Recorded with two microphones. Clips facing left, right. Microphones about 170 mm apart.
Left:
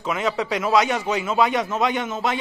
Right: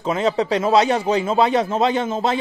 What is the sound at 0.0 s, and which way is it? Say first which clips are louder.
A man's voice: right 4 dB; 30° right (ahead or behind).